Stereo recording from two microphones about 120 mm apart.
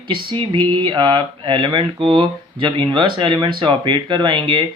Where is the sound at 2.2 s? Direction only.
40° right (ahead or behind).